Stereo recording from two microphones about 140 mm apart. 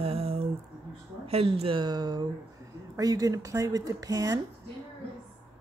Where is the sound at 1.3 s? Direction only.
45° right (ahead or behind); by 4.4 s 25° right (ahead or behind).